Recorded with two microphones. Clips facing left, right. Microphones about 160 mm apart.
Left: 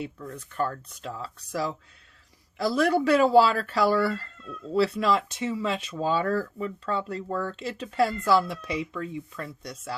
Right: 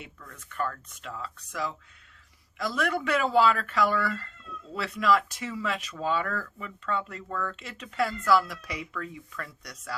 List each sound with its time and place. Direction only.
0.0 s speech: 30° left (ahead or behind)